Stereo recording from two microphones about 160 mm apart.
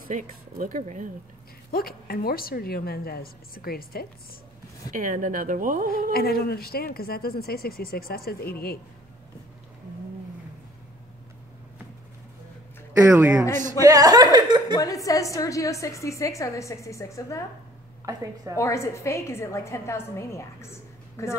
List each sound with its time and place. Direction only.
0.1 s speech: 55° right (ahead or behind)
1.7 s speech: 65° left (ahead or behind)
4.9 s speech: 55° right (ahead or behind)
6.1 s speech: 75° left (ahead or behind)
13.1 s a man's voice: 10° right (ahead or behind)
13.7 s speech: 20° right (ahead or behind)
14.8 s a woman's voice: 20° left (ahead or behind)
18.0 s a woman's voice: 20° right (ahead or behind)
18.6 s a woman's voice: 20° left (ahead or behind)